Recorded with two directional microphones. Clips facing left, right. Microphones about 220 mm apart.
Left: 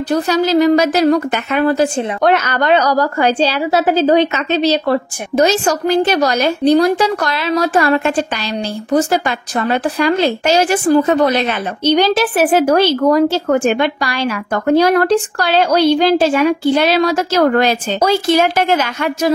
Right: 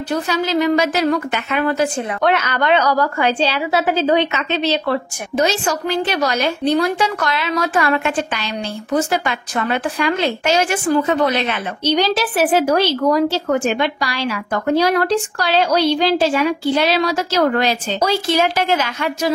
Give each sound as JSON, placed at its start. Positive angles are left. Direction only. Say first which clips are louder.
{"t": 0.1, "sound": "a woman's voice", "louder": "left 5 dB", "side_deg": 40}